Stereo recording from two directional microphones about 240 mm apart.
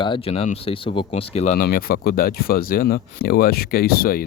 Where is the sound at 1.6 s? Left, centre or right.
Left.